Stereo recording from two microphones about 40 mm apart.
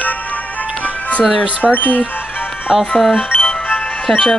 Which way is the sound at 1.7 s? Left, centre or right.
Left.